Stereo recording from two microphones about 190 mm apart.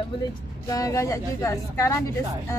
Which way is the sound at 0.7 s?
15° left (ahead or behind).